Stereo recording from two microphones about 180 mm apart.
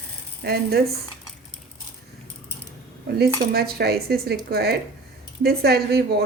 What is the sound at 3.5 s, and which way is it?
A woman's voice, 60° right (ahead or behind).